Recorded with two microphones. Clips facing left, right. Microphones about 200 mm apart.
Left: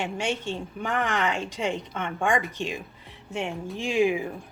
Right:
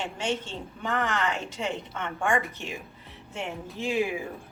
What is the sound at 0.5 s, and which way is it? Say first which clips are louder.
A woman's voice: left 2 dB; 15° left (ahead or behind).